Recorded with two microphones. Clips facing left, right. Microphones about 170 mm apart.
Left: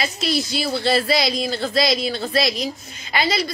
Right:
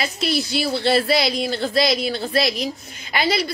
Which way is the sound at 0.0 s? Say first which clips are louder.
Even; 55° right (ahead or behind).